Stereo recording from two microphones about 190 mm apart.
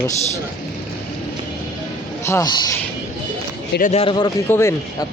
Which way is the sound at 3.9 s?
30° left (ahead or behind).